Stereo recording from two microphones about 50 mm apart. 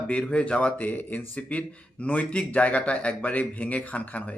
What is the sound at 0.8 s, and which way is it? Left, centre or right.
Speech, left.